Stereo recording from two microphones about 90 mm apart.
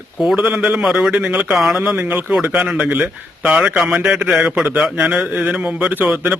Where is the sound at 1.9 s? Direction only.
15° right (ahead or behind).